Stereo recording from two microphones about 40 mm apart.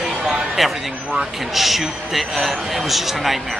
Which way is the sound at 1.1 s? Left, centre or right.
Centre.